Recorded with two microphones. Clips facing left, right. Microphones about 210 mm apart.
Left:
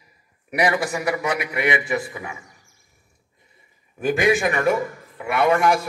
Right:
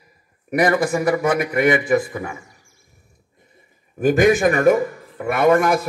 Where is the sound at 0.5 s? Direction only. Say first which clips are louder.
Right 4 dB; 50° right (ahead or behind).